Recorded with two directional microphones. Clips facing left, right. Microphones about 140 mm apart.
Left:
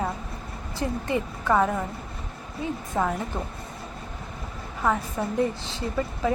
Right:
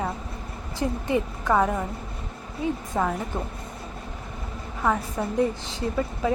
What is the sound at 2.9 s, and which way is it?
Speech, centre (ahead or behind).